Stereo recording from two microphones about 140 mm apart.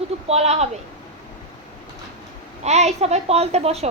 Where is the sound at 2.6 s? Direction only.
50° right (ahead or behind).